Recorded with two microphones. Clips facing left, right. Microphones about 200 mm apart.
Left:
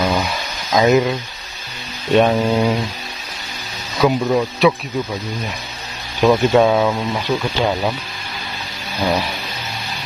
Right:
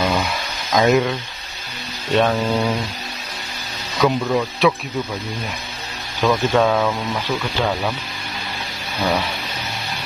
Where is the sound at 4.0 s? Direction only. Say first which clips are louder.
Left 2 dB; 10° left (ahead or behind).